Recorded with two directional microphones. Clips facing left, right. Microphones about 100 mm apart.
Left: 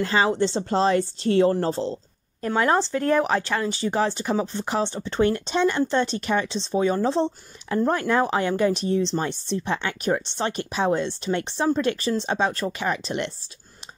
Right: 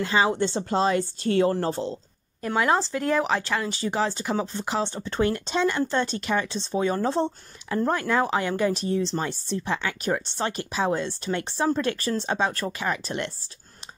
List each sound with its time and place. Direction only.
0.0 s speech: 15° right (ahead or behind)
0.3 s a woman's voice: 25° left (ahead or behind)
2.4 s speech: 10° right (ahead or behind)
4.4 s speech: 20° left (ahead or behind)
7.1 s speech: 10° right (ahead or behind)
7.9 s speech: 20° left (ahead or behind)